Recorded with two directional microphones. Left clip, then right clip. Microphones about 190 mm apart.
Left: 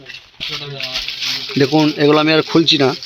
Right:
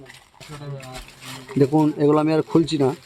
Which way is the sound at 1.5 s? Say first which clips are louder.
Left 4 dB; centre (ahead or behind).